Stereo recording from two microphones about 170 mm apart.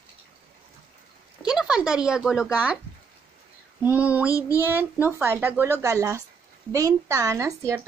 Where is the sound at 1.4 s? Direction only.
5° right (ahead or behind).